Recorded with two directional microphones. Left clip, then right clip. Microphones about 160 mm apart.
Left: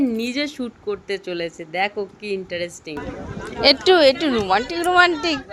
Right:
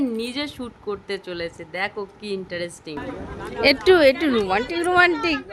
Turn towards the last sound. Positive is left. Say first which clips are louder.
# left 2 dB
turn(degrees=-15)  # may be behind; listen again after turning